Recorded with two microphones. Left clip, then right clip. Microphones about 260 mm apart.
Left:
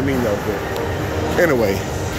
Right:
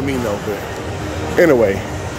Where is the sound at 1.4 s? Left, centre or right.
Right.